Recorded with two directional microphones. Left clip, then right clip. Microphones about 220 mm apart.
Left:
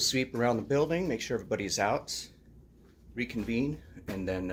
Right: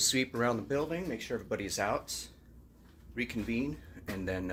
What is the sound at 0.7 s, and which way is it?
Speech, 15° left (ahead or behind).